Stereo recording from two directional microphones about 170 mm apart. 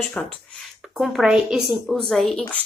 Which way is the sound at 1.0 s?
Centre (ahead or behind).